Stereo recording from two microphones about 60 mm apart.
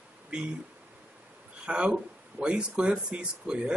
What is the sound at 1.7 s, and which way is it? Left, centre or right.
Speech, centre.